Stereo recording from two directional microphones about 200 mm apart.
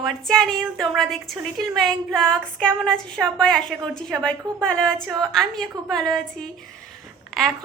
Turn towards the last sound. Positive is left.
turn(degrees=0)  # may be behind; listen again after turning